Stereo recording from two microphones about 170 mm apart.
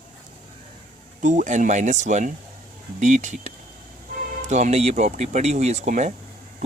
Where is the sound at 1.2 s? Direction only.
45° right (ahead or behind).